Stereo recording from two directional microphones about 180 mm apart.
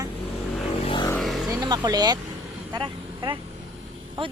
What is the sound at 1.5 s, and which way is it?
Vehicle, 25° right (ahead or behind).